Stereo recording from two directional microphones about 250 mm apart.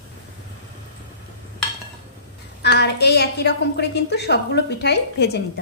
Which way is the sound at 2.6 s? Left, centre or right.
Left.